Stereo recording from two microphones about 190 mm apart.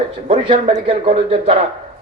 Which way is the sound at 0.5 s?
40° right (ahead or behind).